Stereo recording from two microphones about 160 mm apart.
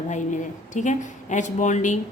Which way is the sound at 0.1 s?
50° left (ahead or behind).